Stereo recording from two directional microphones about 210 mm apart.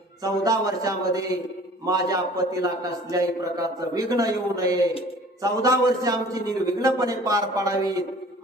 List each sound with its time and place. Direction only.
0.2 s a man's voice: 15° right (ahead or behind)